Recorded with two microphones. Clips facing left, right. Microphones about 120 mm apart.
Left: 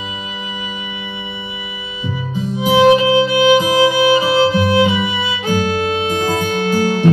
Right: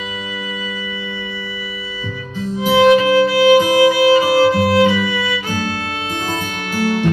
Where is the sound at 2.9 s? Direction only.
20° left (ahead or behind).